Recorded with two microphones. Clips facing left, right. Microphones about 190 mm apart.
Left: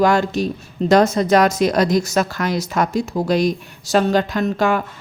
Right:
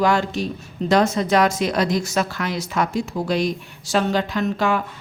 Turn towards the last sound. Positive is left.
turn(degrees=45)  # may be behind; listen again after turning